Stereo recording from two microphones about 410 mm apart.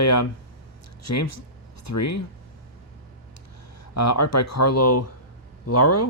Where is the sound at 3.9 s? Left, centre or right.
Left.